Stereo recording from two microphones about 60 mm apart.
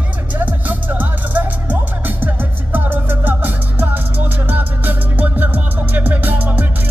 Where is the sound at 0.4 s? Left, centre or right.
Right.